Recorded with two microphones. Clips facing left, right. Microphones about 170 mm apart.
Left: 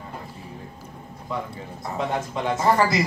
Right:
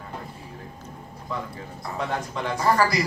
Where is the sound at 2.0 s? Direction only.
20° left (ahead or behind).